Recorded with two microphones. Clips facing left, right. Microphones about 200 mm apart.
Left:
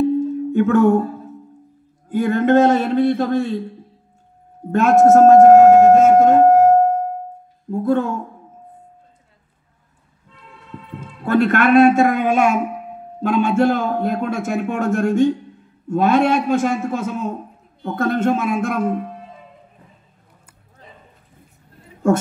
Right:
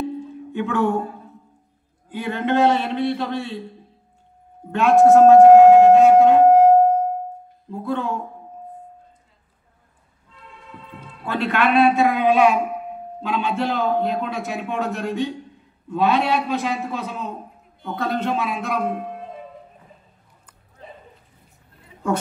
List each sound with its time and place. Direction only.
0.2 s music: 40° left (ahead or behind)
2.0 s a man's voice: 45° left (ahead or behind)
4.7 s a sound: 40° left (ahead or behind)
7.7 s a man's voice: 45° left (ahead or behind)
11.0 s a man's voice: 45° left (ahead or behind)